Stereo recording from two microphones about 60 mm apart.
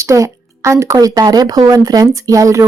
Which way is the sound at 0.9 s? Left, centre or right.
Right.